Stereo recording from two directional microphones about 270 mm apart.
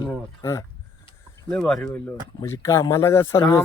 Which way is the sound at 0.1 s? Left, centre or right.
Centre.